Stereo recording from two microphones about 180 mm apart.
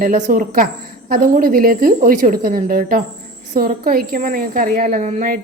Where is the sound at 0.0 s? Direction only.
45° right (ahead or behind).